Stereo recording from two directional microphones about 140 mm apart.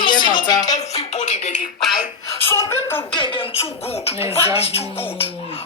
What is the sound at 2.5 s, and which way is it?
Speech, 20° left (ahead or behind).